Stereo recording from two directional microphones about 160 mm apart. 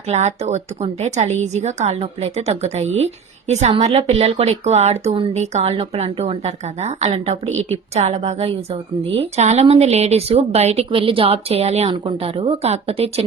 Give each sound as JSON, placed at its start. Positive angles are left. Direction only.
{"t": 0.1, "sound": "a woman's voice", "side_deg": -45}